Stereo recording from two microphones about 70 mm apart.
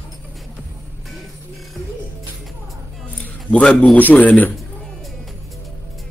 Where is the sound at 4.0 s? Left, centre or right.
Left.